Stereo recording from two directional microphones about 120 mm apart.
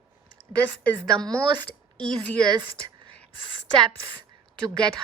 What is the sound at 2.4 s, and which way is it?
Speech, 35° right (ahead or behind).